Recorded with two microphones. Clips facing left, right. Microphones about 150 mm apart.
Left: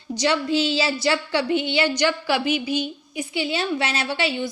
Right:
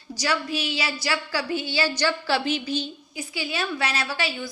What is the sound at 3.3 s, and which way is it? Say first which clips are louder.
Speech: left 5 dB; 25° left (ahead or behind).